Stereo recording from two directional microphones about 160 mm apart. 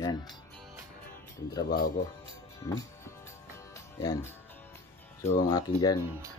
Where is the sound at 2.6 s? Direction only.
25° left (ahead or behind).